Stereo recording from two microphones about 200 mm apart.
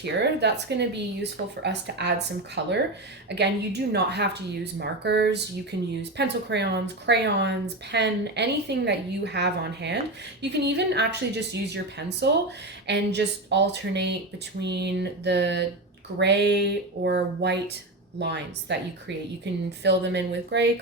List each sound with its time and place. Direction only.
0.0 s speech: 55° right (ahead or behind)